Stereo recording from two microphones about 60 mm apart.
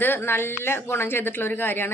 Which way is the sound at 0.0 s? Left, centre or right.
Left.